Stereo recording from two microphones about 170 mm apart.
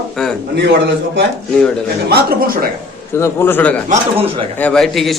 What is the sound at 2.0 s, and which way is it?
Speech, 60° right (ahead or behind).